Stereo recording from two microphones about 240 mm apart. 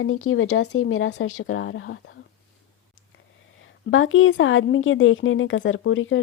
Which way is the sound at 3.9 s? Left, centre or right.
Left.